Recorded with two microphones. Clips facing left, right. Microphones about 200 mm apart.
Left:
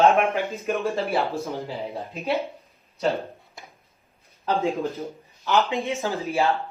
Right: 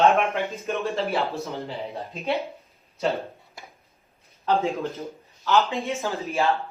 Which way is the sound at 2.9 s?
Centre (ahead or behind).